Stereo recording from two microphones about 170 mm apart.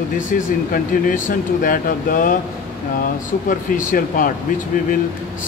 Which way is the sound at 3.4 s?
55° left (ahead or behind).